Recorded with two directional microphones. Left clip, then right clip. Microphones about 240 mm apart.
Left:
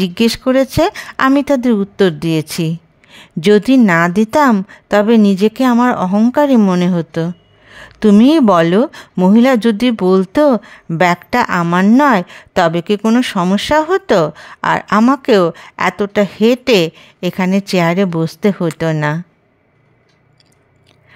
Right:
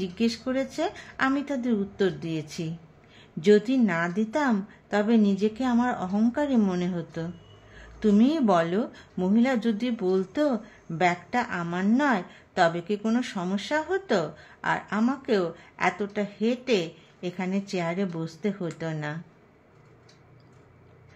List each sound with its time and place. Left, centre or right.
0.0 s a woman's voice: left